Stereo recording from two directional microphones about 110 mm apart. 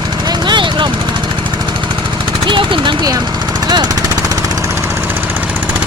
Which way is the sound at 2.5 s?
50° right (ahead or behind).